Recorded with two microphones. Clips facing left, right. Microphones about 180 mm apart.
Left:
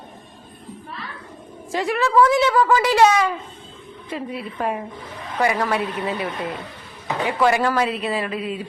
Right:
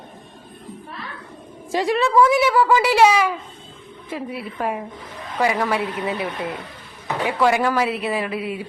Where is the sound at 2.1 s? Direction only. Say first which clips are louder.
Left 1 dB; 10° right (ahead or behind).